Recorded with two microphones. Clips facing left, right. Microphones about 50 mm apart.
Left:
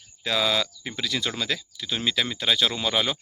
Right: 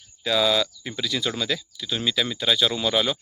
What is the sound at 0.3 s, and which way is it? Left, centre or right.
Speech, left.